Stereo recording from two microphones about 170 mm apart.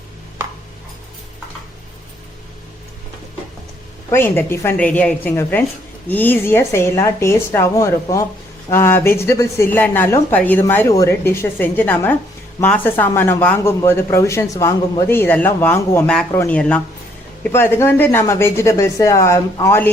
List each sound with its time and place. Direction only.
4.1 s speech: 15° left (ahead or behind)